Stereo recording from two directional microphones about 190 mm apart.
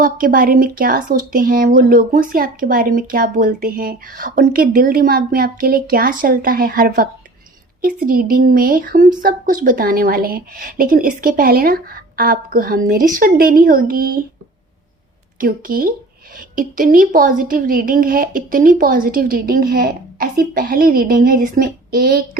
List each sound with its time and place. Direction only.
0.0 s speech: 45° right (ahead or behind)
15.4 s speech: 50° right (ahead or behind)